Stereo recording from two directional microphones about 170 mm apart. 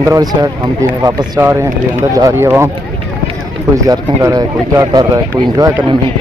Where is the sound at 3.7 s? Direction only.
20° right (ahead or behind).